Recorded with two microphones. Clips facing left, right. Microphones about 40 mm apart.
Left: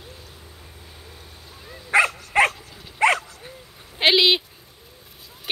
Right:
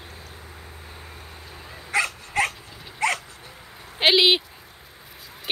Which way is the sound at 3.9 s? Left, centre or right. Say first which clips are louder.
Even; centre.